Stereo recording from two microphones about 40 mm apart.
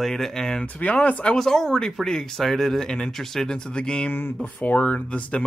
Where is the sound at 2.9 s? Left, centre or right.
Centre.